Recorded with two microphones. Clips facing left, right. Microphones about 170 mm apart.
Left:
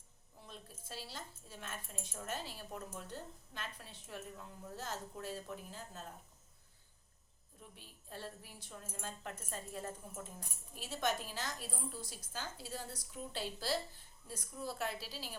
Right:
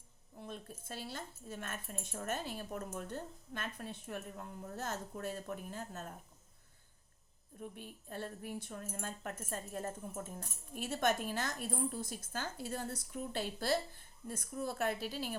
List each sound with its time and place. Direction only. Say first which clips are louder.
0.3 s speech: right 7 dB; 55° right (ahead or behind)
7.6 s speech: right 11 dB; 55° right (ahead or behind)